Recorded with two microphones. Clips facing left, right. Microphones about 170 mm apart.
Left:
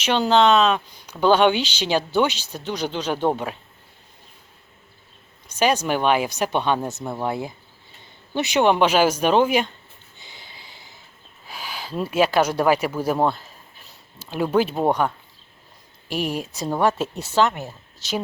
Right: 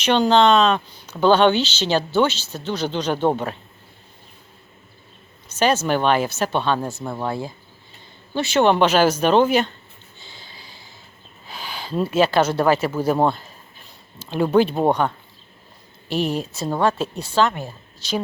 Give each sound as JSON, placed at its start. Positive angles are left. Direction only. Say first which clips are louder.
{"t": 0.0, "sound": "speech", "louder": "right 2 dB", "side_deg": 5}
{"t": 5.5, "sound": "speech", "louder": "right 1 dB", "side_deg": 10}
{"t": 10.2, "sound": "a sound", "louder": "right 1 dB", "side_deg": 20}
{"t": 11.4, "sound": "speech", "louder": "right 1 dB", "side_deg": 10}